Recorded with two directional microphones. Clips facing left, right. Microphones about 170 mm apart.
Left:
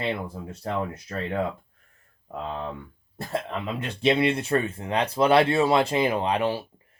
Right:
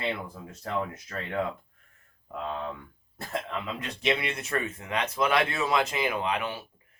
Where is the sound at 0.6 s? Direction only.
30° left (ahead or behind).